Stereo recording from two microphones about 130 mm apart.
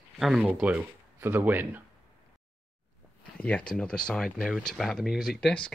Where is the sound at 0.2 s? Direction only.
Centre (ahead or behind).